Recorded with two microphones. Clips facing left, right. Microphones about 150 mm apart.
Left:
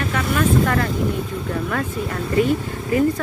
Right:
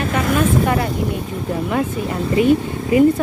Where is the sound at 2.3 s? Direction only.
20° right (ahead or behind).